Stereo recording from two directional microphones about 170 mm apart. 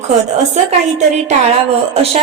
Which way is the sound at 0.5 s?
40° right (ahead or behind).